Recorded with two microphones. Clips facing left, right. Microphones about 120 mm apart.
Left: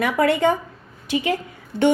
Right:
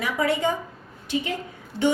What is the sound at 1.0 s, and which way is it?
Speech, 90° left.